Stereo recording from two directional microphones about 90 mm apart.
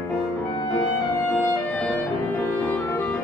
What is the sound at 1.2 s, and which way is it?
Music, 25° left (ahead or behind).